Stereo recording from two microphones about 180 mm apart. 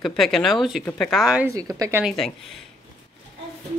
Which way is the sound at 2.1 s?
Centre (ahead or behind).